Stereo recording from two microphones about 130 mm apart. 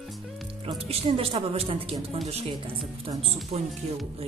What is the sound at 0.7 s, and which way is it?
A woman's voice, 50° right (ahead or behind).